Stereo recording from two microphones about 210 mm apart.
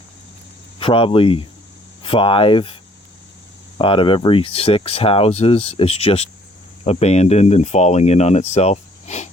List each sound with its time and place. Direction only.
0.8 s speech: 25° left (ahead or behind)
3.8 s speech: 25° left (ahead or behind)